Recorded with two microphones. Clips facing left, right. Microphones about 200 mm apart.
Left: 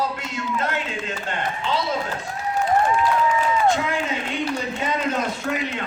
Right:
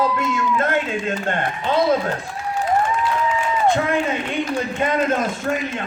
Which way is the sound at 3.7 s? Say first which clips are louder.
Right 4 dB; 55° right (ahead or behind).